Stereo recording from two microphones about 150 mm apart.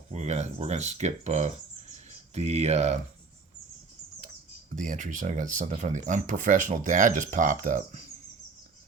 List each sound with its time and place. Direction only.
0.1 s speech: 50° right (ahead or behind)
4.7 s speech: 60° right (ahead or behind)